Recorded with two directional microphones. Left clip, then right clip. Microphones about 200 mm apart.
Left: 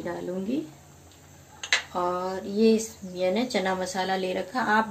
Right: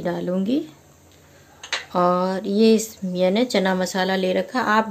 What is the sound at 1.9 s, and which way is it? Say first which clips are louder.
Speech: right 8 dB; 55° right (ahead or behind).